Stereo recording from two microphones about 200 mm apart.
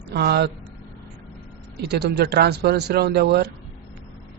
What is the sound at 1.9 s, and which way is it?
A man's voice, 55° right (ahead or behind).